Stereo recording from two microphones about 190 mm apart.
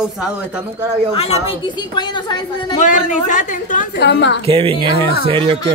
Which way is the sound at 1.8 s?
25° left (ahead or behind).